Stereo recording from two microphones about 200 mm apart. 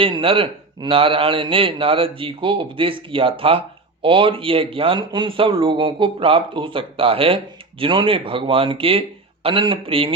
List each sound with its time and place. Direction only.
0.0 s speech: 25° right (ahead or behind)